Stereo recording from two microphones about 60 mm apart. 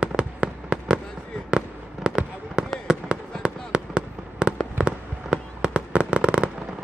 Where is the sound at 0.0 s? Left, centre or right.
Centre.